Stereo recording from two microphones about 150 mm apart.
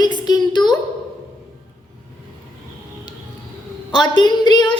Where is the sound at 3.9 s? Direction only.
30° left (ahead or behind).